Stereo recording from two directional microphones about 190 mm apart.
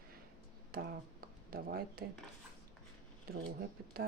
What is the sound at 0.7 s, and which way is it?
Speech, 50° right (ahead or behind).